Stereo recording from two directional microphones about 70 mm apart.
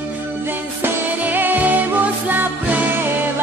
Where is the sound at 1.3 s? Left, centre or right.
Right.